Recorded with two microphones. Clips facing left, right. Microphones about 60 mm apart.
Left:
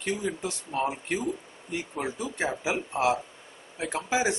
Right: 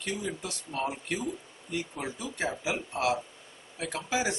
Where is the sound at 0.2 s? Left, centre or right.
Left.